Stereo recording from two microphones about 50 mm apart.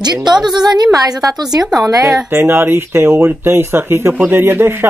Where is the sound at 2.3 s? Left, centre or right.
Right.